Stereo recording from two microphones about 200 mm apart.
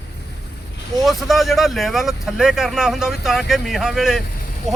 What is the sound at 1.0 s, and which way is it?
Speech, centre (ahead or behind).